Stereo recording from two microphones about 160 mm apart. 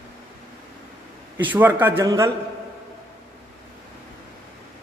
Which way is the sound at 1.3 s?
10° right (ahead or behind).